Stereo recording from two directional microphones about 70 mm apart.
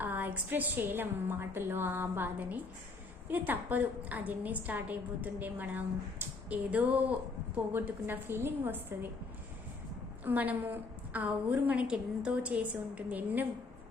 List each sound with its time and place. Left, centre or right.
0.0 s a woman's voice: right
10.2 s a woman's voice: right